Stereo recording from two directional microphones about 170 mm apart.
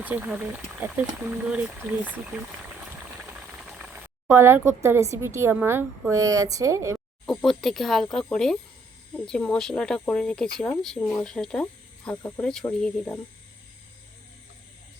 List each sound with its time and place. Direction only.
0.0 s speech: 10° right (ahead or behind)
3.4 s speech: 5° right (ahead or behind)
7.3 s speech: centre (ahead or behind)